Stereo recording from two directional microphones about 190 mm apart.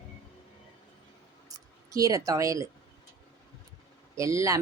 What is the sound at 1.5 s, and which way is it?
Speech, 20° right (ahead or behind).